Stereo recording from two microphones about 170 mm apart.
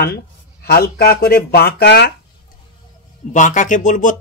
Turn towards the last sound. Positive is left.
turn(degrees=50)  # may be behind; listen again after turning